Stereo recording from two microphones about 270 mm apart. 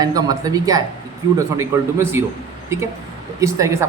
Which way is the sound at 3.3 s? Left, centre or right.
Centre.